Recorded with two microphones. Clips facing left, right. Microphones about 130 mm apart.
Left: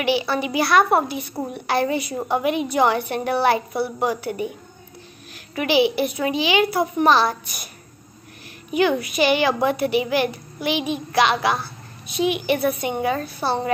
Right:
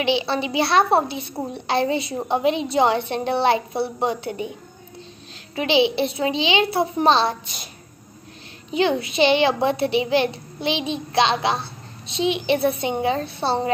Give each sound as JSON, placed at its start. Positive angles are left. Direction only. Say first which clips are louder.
{"t": 0.0, "sound": "a child's voice", "louder": "even", "side_deg": -20}
{"t": 5.6, "sound": "a child's voice", "louder": "even", "side_deg": -20}
{"t": 8.6, "sound": "a child's voice", "louder": "left 1 dB", "side_deg": -25}